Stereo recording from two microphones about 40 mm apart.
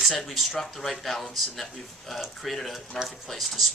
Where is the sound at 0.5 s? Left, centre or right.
Centre.